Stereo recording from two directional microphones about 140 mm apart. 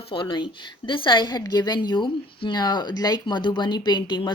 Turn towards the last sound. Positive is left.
turn(degrees=35)  # may be behind; listen again after turning